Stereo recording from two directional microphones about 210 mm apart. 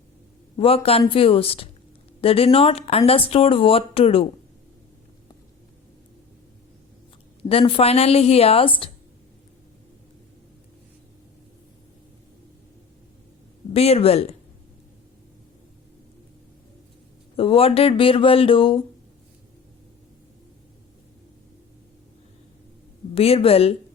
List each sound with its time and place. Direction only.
0.5 s speech: 25° left (ahead or behind)
7.4 s speech: 25° left (ahead or behind)
13.7 s speech: 30° left (ahead or behind)
17.3 s speech: 25° left (ahead or behind)
23.1 s speech: 30° left (ahead or behind)